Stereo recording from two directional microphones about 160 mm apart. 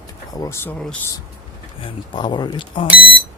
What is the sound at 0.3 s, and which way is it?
Speech, 15° left (ahead or behind).